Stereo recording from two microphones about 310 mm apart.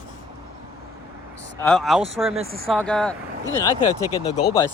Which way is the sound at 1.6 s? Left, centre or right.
Centre.